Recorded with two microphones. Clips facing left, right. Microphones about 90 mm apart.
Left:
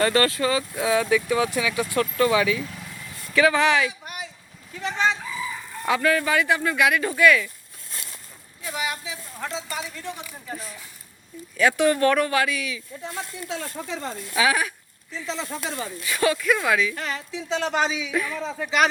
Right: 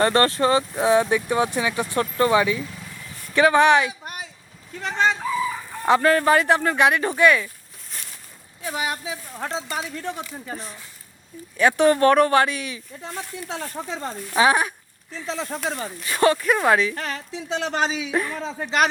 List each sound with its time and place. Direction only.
0.0 s speech: 30° right (ahead or behind)
4.0 s a sound: 40° right (ahead or behind)
5.8 s speech: 40° right (ahead or behind)
8.6 s speech: 30° right (ahead or behind)